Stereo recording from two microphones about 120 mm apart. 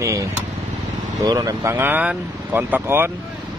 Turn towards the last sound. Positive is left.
turn(degrees=-15)  # may be behind; listen again after turning